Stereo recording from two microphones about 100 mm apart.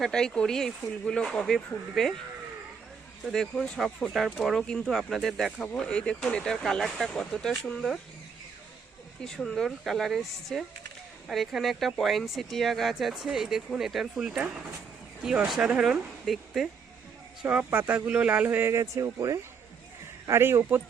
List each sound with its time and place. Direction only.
0.0 s speech: 5° left (ahead or behind)
3.2 s speech: 5° left (ahead or behind)
9.2 s speech: 5° left (ahead or behind)
17.4 s speech: 15° right (ahead or behind)
18.7 s speech: 30° right (ahead or behind)